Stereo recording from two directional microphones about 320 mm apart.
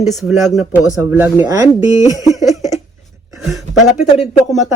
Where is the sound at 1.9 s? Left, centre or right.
Centre.